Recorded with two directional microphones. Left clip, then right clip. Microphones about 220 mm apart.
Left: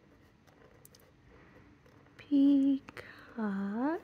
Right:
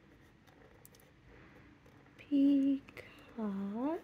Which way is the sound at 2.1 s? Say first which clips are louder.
Left 3 dB; 20° left (ahead or behind).